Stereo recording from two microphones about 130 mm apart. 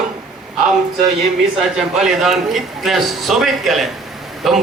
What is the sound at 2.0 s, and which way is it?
A man's voice, 5° right (ahead or behind).